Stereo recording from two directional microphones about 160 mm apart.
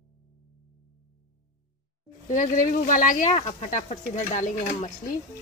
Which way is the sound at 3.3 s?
45° left (ahead or behind).